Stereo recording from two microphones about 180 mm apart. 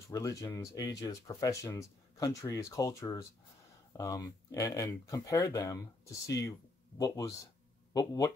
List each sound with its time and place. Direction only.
0.1 s speech: 20° left (ahead or behind)